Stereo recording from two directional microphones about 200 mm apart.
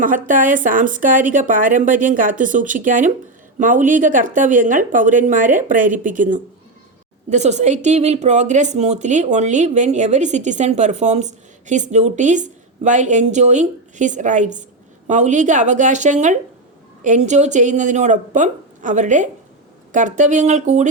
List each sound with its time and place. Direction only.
0.0 s a woman's voice: 40° right (ahead or behind)